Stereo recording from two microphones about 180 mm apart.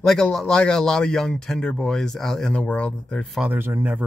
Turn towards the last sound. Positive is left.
turn(degrees=-10)  # may be behind; listen again after turning